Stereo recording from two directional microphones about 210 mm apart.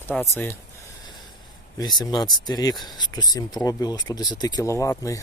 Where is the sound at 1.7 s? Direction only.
20° left (ahead or behind).